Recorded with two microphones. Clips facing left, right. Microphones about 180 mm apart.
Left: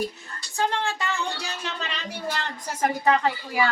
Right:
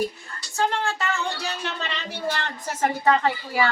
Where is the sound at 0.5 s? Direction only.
15° left (ahead or behind).